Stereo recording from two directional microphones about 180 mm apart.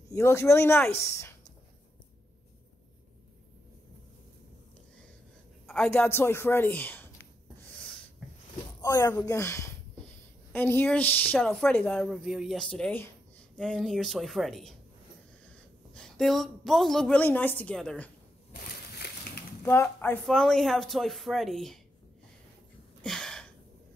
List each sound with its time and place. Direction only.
0.1 s speech: 15° left (ahead or behind)
5.9 s speech: 10° left (ahead or behind)
8.8 s speech: 15° left (ahead or behind)
15.9 s speech: 5° left (ahead or behind)
19.0 s a sound: 65° left (ahead or behind)
19.6 s speech: 15° left (ahead or behind)
23.0 s a sound: 5° left (ahead or behind)